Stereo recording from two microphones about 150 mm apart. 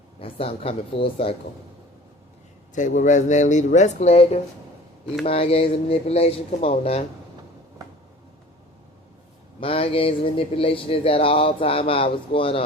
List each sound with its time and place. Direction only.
0.2 s speech: 40° left (ahead or behind)
2.7 s speech: 55° left (ahead or behind)
9.6 s speech: 40° left (ahead or behind)